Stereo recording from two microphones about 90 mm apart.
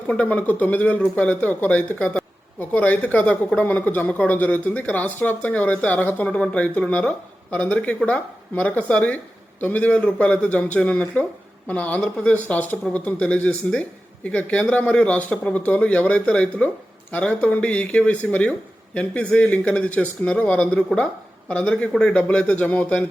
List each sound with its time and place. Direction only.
0.1 s a woman's voice: 15° left (ahead or behind)